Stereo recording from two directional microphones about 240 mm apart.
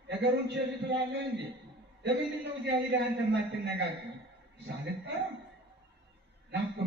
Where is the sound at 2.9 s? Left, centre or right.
Right.